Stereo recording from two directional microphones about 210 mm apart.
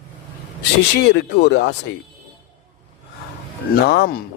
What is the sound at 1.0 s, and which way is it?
Speech, 55° left (ahead or behind).